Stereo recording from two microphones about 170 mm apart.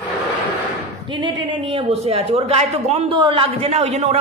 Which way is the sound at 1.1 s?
25° right (ahead or behind).